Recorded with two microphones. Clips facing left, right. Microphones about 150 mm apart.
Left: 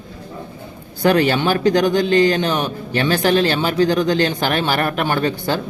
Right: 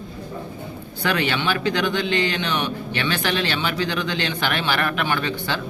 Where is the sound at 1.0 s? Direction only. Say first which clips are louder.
Left 7 dB; 40° left (ahead or behind).